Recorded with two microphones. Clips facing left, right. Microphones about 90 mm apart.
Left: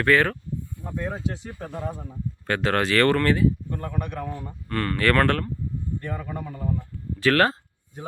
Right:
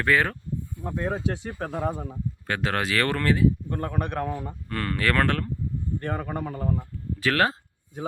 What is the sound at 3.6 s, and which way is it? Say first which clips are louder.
Speech: right 2 dB; 50° right (ahead or behind).